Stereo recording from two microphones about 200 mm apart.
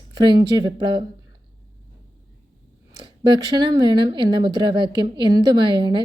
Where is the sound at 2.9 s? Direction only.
20° right (ahead or behind).